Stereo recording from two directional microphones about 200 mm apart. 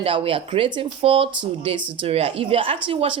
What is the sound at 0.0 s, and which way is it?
Speech, 25° right (ahead or behind).